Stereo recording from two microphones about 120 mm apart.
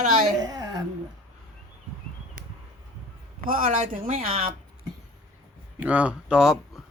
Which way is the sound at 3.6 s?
70° right (ahead or behind).